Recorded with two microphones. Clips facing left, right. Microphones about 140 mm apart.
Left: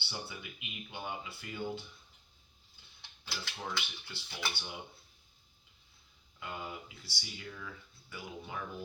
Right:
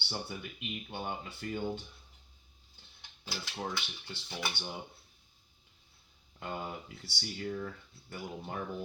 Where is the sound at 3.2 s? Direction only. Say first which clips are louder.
Right 3 dB; 40° right (ahead or behind).